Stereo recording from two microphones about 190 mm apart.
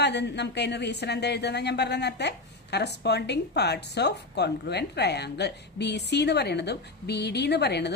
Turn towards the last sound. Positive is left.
turn(degrees=60)  # may be behind; listen again after turning